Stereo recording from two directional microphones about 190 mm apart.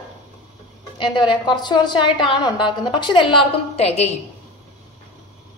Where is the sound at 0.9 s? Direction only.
25° left (ahead or behind).